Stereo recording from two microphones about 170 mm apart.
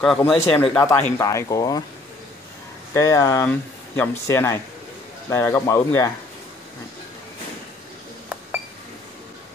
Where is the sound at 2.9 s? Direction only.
20° left (ahead or behind).